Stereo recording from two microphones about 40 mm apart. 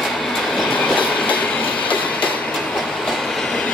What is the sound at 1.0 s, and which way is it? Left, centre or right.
Train, left.